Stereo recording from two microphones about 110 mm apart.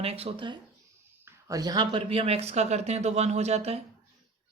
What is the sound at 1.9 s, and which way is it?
Speech, 55° right (ahead or behind).